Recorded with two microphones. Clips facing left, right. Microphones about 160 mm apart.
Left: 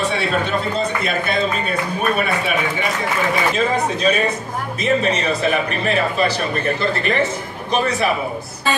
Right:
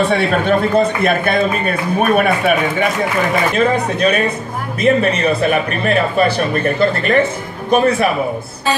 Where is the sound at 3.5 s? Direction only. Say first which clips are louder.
Right 4 dB; 60° right (ahead or behind).